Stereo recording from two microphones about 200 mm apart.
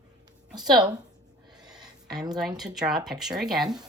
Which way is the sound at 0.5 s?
20° right (ahead or behind).